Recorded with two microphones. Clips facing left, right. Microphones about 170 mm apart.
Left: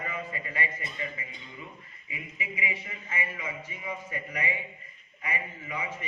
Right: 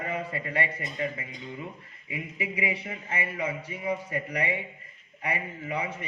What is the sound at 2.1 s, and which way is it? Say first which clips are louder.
A man's voice: right 6 dB; 65° right (ahead or behind).